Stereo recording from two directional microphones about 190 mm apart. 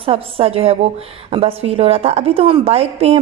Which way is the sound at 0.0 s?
30° right (ahead or behind).